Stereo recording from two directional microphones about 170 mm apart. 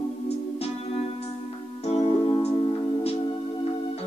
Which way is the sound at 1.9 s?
35° left (ahead or behind).